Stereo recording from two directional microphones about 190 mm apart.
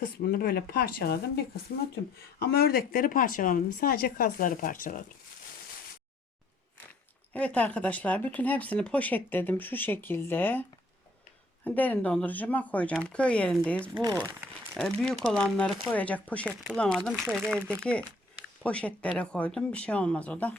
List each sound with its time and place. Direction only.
0.0 s speech: 50° left (ahead or behind)
7.3 s speech: 5° left (ahead or behind)
18.6 s speech: 5° left (ahead or behind)